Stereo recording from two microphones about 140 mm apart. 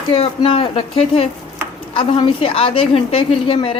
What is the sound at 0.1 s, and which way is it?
A woman's voice, 40° left (ahead or behind).